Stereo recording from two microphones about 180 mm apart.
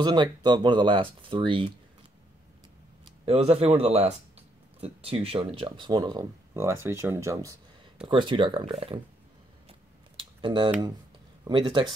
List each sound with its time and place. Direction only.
0.0 s speech: 25° right (ahead or behind)
3.1 s speech: 30° right (ahead or behind); by 7.5 s 15° right (ahead or behind)
8.1 s speech: 25° right (ahead or behind)
9.7 s a sound: 25° right (ahead or behind)
11.4 s speech: 25° right (ahead or behind)